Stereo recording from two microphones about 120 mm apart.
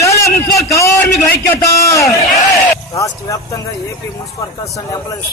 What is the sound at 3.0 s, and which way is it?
Speech, 30° left (ahead or behind).